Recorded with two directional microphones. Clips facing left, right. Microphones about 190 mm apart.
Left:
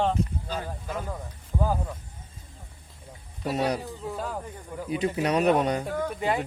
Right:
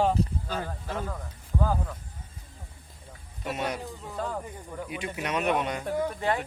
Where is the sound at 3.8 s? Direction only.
5° left (ahead or behind).